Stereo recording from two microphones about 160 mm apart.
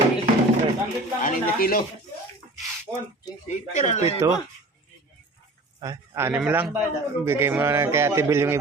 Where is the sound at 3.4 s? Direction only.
45° left (ahead or behind).